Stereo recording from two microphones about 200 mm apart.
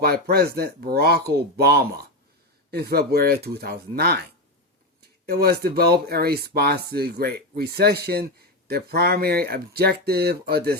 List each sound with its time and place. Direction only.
0.0 s speech: 50° right (ahead or behind)